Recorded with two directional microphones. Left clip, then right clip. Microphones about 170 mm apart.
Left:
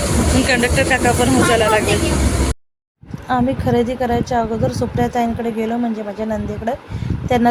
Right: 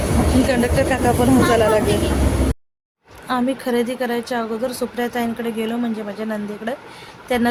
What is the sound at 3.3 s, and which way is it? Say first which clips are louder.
Speech: left 3 dB; centre (ahead or behind).